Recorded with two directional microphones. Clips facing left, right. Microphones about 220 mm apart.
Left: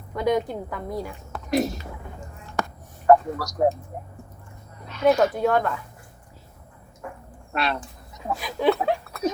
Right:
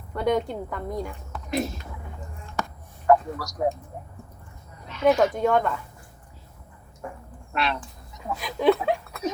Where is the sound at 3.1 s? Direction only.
40° left (ahead or behind).